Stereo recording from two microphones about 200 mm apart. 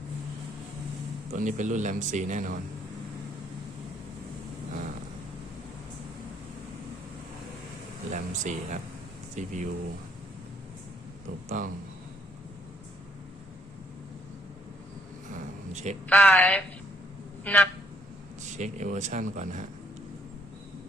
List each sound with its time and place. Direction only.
1.3 s speech: 40° right (ahead or behind)
8.1 s speech: 35° right (ahead or behind)
11.4 s speech: 40° right (ahead or behind)
15.3 s a sound: 35° right (ahead or behind)
16.0 s a woman's voice: 10° left (ahead or behind)
17.4 s a sound: 5° left (ahead or behind)
18.4 s speech: 35° right (ahead or behind)